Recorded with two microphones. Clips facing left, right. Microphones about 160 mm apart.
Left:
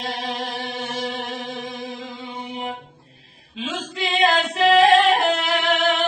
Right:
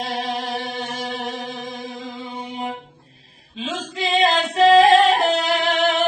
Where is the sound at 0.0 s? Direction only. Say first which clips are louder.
Right 2 dB; 45° right (ahead or behind).